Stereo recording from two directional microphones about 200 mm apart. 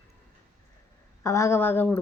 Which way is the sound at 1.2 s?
15° left (ahead or behind).